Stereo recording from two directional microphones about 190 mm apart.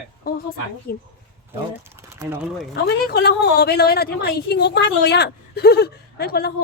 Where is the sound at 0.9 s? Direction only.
55° left (ahead or behind).